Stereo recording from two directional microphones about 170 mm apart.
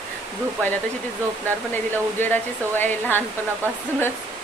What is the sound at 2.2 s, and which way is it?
Speech, 10° left (ahead or behind).